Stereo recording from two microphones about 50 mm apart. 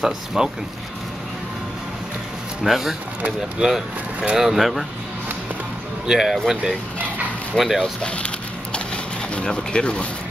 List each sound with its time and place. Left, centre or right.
0.0 s speech: centre
2.6 s speech: centre
3.2 s speech: right
3.6 s speech: centre
6.0 s speech: centre
7.5 s speech: centre
8.7 s a sound: centre
9.7 s speech: centre